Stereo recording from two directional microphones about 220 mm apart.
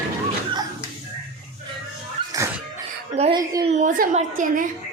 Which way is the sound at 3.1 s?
30° right (ahead or behind).